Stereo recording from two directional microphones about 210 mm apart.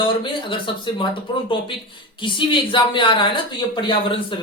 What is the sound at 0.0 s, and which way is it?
Speech, 25° left (ahead or behind).